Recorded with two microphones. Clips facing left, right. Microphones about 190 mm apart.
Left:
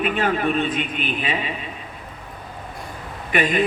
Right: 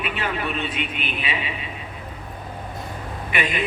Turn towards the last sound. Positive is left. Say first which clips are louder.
# left 5 dB
turn(degrees=45)  # may be behind; listen again after turning